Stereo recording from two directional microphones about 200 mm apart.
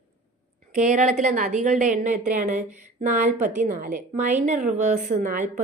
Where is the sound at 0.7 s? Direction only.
40° right (ahead or behind).